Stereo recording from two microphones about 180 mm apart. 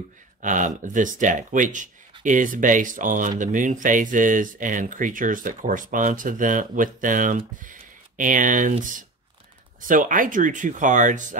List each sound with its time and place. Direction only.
0.4 s speech: 45° right (ahead or behind)